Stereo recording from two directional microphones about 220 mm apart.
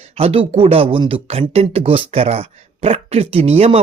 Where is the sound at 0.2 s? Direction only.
25° right (ahead or behind).